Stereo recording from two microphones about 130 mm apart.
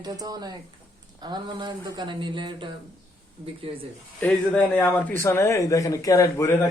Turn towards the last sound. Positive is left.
turn(degrees=25)  # may be behind; listen again after turning